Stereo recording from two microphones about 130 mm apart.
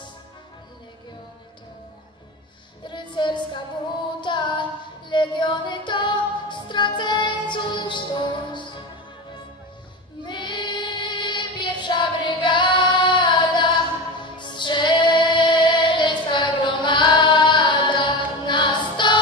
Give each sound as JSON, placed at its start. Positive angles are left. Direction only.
{"t": 2.9, "sound": "music", "side_deg": 35}
{"t": 10.2, "sound": "child singing", "side_deg": 35}
{"t": 14.1, "sound": "music", "side_deg": 35}